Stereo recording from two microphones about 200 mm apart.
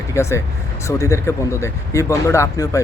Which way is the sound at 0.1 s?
15° left (ahead or behind).